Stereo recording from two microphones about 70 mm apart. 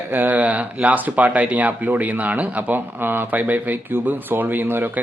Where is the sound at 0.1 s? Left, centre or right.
Right.